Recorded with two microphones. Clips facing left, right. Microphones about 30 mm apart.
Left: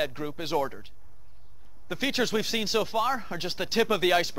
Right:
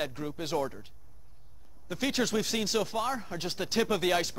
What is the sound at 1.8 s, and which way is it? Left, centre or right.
Speech, centre.